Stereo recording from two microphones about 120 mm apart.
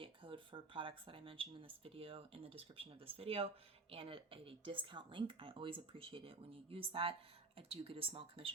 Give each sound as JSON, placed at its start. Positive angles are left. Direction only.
{"t": 0.0, "sound": "speech", "side_deg": -45}